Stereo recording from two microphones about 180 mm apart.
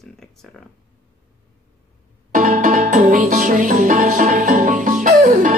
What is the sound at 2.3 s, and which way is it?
Music, 45° right (ahead or behind).